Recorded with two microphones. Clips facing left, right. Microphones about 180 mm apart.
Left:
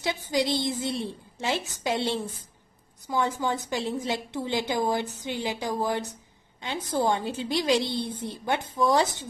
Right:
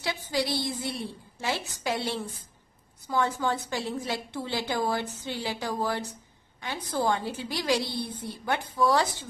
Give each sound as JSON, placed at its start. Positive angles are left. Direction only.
{"t": 0.0, "sound": "a woman's voice", "side_deg": 20}